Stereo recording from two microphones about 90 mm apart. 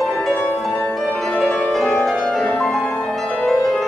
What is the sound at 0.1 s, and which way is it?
Music, 15° left (ahead or behind).